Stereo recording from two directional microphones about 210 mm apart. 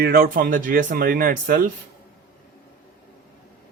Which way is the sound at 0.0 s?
45° right (ahead or behind).